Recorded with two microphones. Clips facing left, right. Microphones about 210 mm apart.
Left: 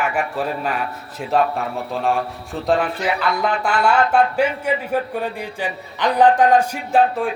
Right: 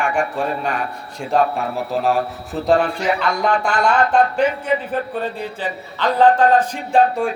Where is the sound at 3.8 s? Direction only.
10° left (ahead or behind).